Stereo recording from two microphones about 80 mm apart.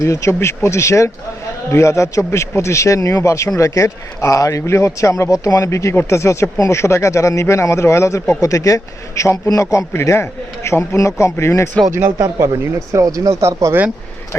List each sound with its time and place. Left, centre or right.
0.0 s speech: left
12.9 s speech: right